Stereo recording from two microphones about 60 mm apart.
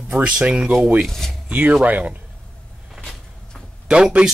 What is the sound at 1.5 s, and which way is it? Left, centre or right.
Speech, right.